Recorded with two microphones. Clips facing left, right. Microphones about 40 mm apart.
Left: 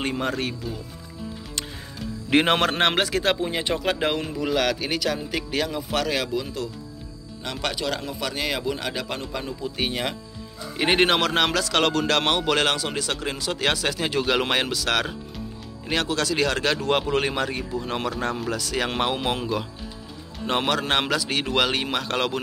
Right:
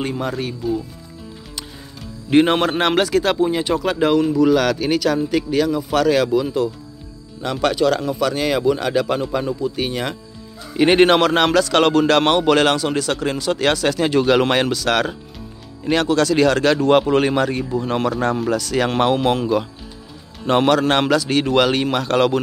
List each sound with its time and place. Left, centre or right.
0.0 s speech: left
0.6 s speech: centre
2.2 s speech: left
2.8 s speech: left
3.5 s speech: left
5.5 s speech: left
5.9 s speech: centre
7.4 s speech: centre
9.6 s speech: centre
10.8 s speech: centre
18.6 s speech: centre